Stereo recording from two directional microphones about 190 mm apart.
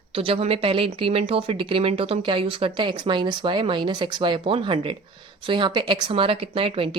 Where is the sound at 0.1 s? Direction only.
30° right (ahead or behind).